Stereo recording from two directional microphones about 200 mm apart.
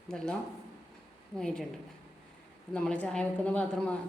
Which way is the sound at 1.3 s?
5° left (ahead or behind).